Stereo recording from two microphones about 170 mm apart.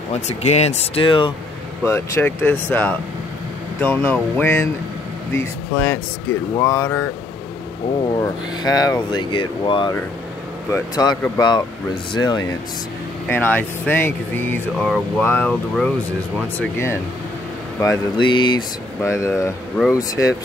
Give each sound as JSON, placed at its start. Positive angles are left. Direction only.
{"t": 0.1, "sound": "speech", "side_deg": 40}
{"t": 1.9, "sound": "speech", "side_deg": 15}
{"t": 8.2, "sound": "speech", "side_deg": 20}
{"t": 13.3, "sound": "speech", "side_deg": 10}
{"t": 17.7, "sound": "speech", "side_deg": 25}
{"t": 18.9, "sound": "speech", "side_deg": 15}